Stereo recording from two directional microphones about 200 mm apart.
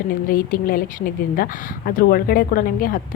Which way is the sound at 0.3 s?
45° left (ahead or behind).